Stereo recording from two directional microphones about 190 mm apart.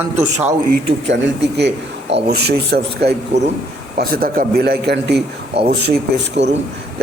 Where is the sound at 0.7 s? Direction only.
65° right (ahead or behind).